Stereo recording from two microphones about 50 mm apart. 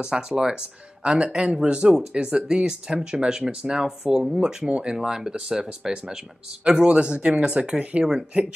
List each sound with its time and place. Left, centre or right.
0.0 s speech: centre